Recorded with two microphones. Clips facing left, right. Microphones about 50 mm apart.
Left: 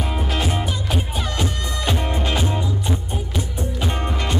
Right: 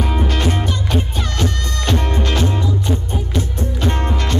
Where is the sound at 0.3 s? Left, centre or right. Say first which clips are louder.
Right 3 dB; centre.